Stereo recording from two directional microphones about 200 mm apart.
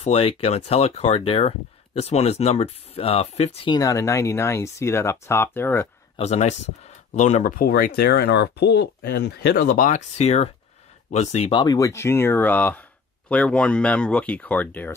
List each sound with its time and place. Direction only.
0.0 s speech: 30° left (ahead or behind); by 5.9 s 10° left (ahead or behind)
6.1 s speech: 35° left (ahead or behind)
11.6 s speech: 20° left (ahead or behind)